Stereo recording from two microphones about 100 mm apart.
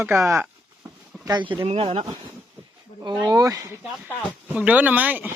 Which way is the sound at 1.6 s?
70° right (ahead or behind).